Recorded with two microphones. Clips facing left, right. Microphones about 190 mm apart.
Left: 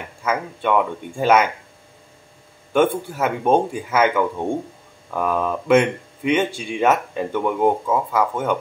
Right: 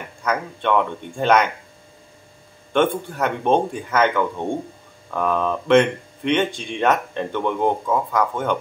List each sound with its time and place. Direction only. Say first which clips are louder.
0.2 s speech: left 1 dB; 5° left (ahead or behind)
2.7 s speech: left 1 dB; 5° left (ahead or behind)